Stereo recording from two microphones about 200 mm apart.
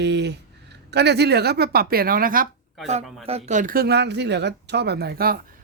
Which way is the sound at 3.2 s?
35° right (ahead or behind).